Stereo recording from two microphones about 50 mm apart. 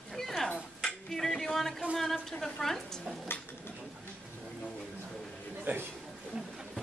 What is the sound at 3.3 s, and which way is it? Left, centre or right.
Speech, left.